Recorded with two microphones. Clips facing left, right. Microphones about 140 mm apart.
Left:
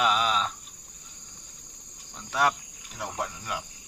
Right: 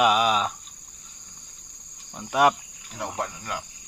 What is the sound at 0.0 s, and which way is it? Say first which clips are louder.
Cricket: right 5 dB; 10° right (ahead or behind).